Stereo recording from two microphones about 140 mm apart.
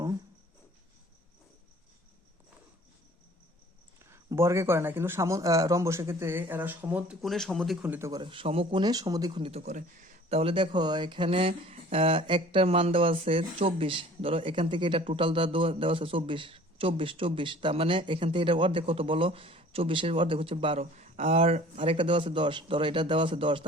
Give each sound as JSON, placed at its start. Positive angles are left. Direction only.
{"t": 4.1, "sound": "a man's voice", "side_deg": -20}
{"t": 7.2, "sound": "speech", "side_deg": 0}
{"t": 7.9, "sound": "a man's voice", "side_deg": -20}
{"t": 8.2, "sound": "speech", "side_deg": -40}
{"t": 8.8, "sound": "a man's voice", "side_deg": -25}
{"t": 9.4, "sound": "speech", "side_deg": -50}
{"t": 21.9, "sound": "speech", "side_deg": -35}